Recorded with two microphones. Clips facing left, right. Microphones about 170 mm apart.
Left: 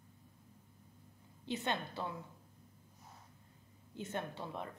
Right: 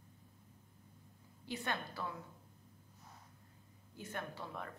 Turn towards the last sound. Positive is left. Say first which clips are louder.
# left 3 dB
turn(degrees=20)  # may be behind; listen again after turning